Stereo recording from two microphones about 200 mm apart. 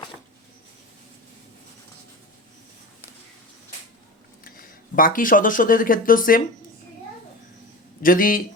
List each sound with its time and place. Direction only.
4.4 s speech: 45° left (ahead or behind)
8.0 s speech: 45° left (ahead or behind)